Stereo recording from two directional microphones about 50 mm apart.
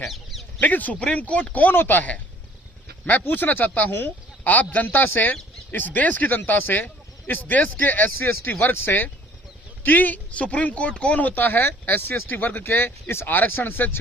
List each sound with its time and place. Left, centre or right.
0.1 s duck: centre
0.6 s speech: left
1.6 s speech: left
4.9 s speech: left
9.8 s speech: left
11.3 s speech: left
13.2 s speech: left